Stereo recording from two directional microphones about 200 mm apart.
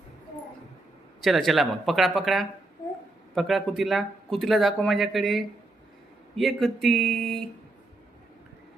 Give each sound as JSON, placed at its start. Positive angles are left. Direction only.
{"t": 1.2, "sound": "speech", "side_deg": 0}